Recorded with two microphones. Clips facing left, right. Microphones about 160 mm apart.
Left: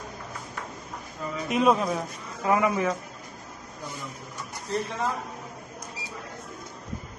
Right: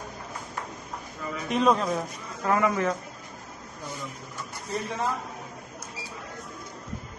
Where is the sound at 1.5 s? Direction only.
5° left (ahead or behind).